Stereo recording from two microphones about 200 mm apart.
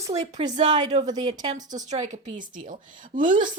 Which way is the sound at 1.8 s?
35° right (ahead or behind).